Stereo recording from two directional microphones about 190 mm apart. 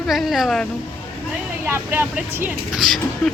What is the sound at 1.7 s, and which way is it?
A woman's voice, 10° right (ahead or behind).